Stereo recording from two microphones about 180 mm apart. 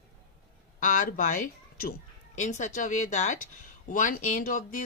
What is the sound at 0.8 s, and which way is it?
A woman's voice, 45° left (ahead or behind).